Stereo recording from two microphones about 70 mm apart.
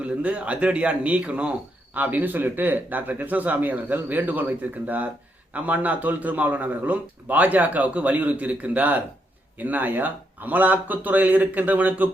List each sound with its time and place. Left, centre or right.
0.0 s speech: centre